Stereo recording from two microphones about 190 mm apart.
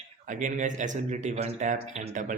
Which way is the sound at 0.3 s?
40° right (ahead or behind).